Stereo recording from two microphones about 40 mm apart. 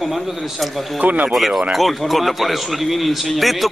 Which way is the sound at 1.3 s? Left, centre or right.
Centre.